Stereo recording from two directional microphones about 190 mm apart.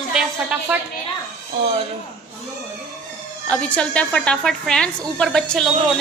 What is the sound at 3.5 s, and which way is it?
A woman's voice, 5° left (ahead or behind).